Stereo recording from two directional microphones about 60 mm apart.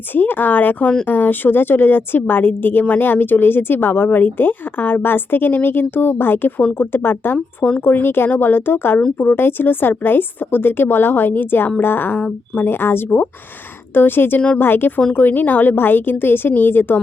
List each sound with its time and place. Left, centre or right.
0.1 s a woman's voice: left